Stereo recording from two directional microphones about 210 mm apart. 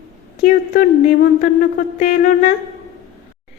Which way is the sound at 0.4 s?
40° left (ahead or behind).